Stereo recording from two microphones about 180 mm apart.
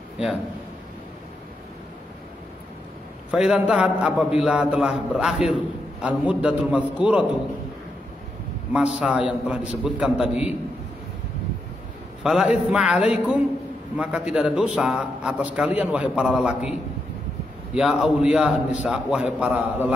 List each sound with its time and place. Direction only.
3.3 s a man's voice: 5° right (ahead or behind)
8.7 s a man's voice: 5° right (ahead or behind)
12.2 s a man's voice: 5° right (ahead or behind)
17.7 s a man's voice: 5° right (ahead or behind)